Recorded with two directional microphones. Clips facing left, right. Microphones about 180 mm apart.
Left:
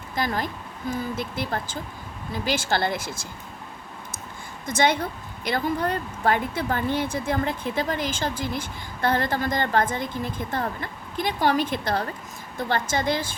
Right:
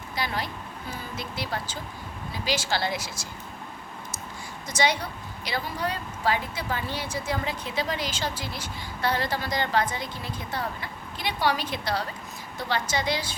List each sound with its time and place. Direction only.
0.2 s a woman's voice: 45° left (ahead or behind)
4.6 s a woman's voice: 55° left (ahead or behind)